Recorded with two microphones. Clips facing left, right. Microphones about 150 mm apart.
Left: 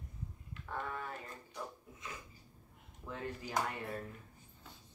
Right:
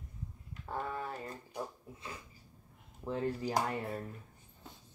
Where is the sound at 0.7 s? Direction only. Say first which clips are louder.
Right 3 dB; 30° right (ahead or behind).